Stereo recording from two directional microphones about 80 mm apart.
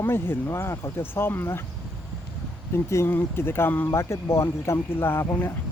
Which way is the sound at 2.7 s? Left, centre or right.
Left.